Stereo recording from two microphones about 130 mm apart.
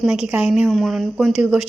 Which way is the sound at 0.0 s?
5° right (ahead or behind).